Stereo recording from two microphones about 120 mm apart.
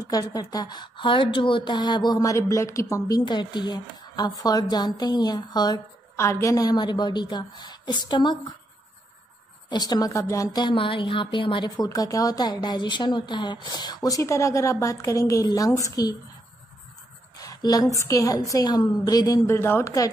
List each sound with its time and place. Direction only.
0.0 s speech: 30° left (ahead or behind)
3.3 s speech: 40° left (ahead or behind)
9.7 s speech: 35° left (ahead or behind)
17.4 s a woman's voice: 30° left (ahead or behind)